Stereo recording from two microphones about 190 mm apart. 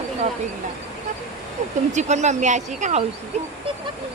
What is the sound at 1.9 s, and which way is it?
Speech, 40° right (ahead or behind).